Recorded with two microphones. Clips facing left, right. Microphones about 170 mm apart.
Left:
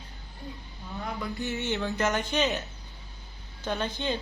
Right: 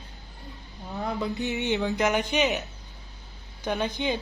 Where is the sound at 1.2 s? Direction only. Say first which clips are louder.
Right 2 dB; 20° right (ahead or behind).